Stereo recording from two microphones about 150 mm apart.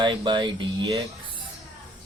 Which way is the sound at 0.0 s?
30° right (ahead or behind).